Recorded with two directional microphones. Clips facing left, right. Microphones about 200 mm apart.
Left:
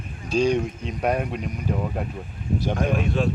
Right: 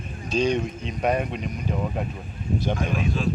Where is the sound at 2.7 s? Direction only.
60° left (ahead or behind).